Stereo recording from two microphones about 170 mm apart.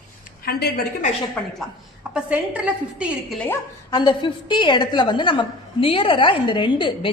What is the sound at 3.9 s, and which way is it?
A woman's voice, 25° left (ahead or behind).